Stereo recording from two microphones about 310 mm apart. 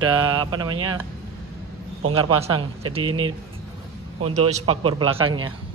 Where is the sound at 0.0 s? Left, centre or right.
Centre.